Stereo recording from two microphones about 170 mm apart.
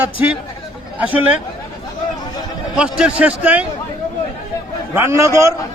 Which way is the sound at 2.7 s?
5° right (ahead or behind).